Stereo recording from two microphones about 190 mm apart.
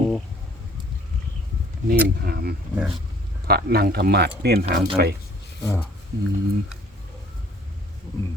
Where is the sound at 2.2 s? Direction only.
55° right (ahead or behind).